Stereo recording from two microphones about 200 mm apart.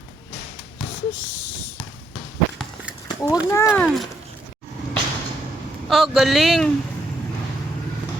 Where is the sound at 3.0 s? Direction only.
15° left (ahead or behind).